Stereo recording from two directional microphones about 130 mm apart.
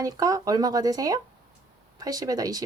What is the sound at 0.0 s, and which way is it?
Speech, 30° right (ahead or behind).